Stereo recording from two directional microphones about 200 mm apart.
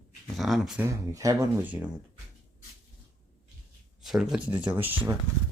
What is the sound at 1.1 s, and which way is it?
Speech, 15° right (ahead or behind).